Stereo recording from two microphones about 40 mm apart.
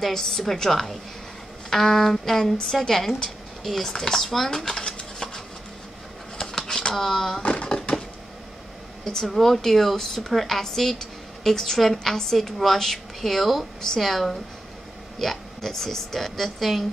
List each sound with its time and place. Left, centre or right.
0.1 s a woman's voice: centre
2.5 s a woman's voice: left
2.9 s a woman's voice: centre
6.4 s a sound: centre
7.0 s a woman's voice: centre
7.4 s a sound: left
9.0 s a woman's voice: centre